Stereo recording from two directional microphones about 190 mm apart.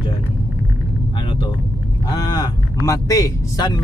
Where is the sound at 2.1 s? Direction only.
20° left (ahead or behind).